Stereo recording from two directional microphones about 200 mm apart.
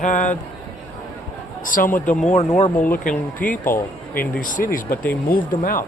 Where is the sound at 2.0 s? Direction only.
5° left (ahead or behind).